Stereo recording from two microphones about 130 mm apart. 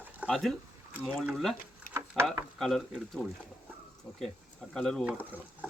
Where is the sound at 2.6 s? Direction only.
Centre (ahead or behind).